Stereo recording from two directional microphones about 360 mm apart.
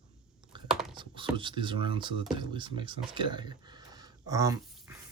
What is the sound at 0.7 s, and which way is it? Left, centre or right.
Computer keyboard, centre.